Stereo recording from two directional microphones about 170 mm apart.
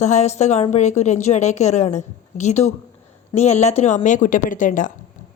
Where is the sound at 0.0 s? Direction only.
40° left (ahead or behind).